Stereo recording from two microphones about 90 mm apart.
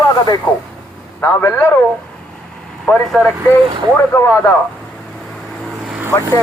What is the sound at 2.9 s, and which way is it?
Speech, 15° left (ahead or behind).